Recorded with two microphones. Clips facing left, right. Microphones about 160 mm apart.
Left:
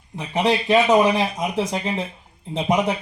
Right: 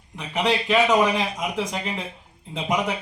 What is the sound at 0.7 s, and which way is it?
Speech, 35° left (ahead or behind).